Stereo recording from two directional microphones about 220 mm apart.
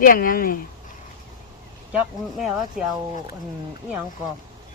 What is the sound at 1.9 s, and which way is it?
Speech, 5° right (ahead or behind).